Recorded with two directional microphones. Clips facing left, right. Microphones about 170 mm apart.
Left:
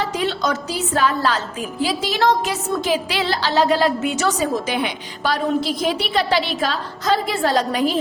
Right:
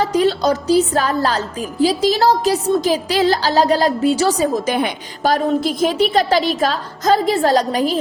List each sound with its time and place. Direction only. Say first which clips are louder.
0.0 s a woman's voice: right 6 dB; 40° right (ahead or behind)